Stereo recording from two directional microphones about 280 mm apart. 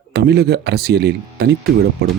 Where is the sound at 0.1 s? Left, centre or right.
Right.